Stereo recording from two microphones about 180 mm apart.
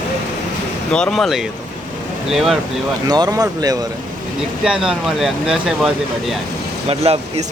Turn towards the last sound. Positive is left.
turn(degrees=-35)  # may be behind; listen again after turning